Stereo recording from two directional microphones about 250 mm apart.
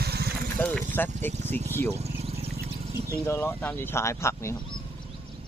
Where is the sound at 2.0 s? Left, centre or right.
Right.